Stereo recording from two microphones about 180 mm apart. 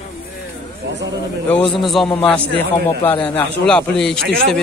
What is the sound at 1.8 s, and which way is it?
A man's voice, centre (ahead or behind).